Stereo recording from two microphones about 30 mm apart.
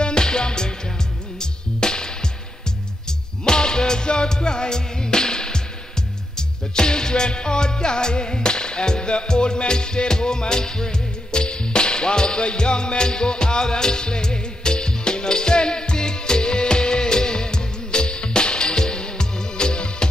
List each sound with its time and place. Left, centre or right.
0.0 s music: left